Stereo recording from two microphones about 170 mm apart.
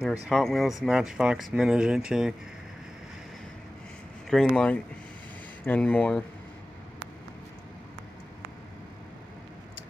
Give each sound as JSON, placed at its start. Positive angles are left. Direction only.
{"t": 0.0, "sound": "speech", "side_deg": 0}
{"t": 4.3, "sound": "speech", "side_deg": 5}